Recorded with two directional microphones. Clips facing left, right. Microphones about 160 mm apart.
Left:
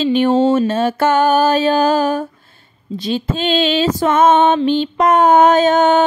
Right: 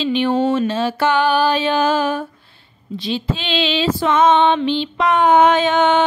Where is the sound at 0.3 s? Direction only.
25° left (ahead or behind).